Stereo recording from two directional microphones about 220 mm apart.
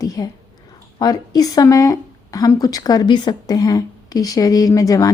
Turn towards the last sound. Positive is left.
turn(degrees=15)  # may be behind; listen again after turning